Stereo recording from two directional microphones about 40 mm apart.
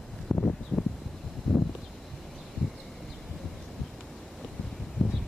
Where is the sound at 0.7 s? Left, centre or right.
Left.